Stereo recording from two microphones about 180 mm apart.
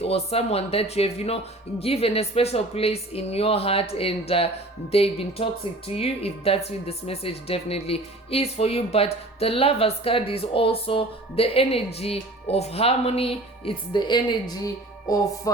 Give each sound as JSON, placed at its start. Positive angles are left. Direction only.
{"t": 0.0, "sound": "speech", "side_deg": 35}
{"t": 15.1, "sound": "music", "side_deg": 20}